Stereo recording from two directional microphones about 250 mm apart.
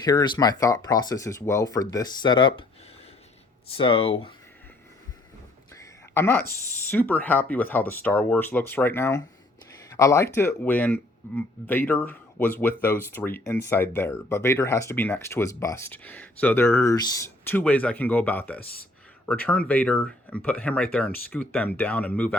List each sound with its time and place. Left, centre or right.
0.0 s speech: centre
3.8 s speech: left
6.1 s speech: centre